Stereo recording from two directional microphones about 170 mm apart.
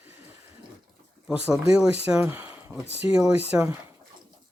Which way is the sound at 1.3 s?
5° right (ahead or behind).